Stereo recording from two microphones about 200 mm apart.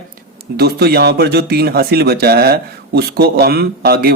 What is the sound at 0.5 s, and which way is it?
Speech, 50° right (ahead or behind).